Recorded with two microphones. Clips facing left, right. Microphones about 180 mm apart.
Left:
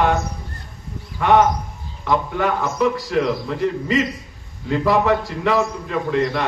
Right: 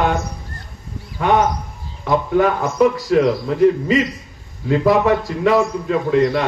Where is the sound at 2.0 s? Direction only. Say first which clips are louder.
Right 4 dB; 45° right (ahead or behind).